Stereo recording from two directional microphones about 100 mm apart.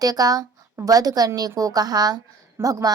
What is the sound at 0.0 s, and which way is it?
A woman's voice, 40° right (ahead or behind).